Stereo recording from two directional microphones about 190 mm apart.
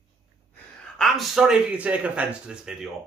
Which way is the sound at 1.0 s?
Centre (ahead or behind).